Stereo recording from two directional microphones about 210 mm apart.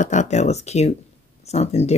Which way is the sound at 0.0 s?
35° left (ahead or behind).